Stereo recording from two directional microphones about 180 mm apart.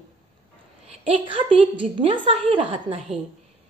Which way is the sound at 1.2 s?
30° right (ahead or behind).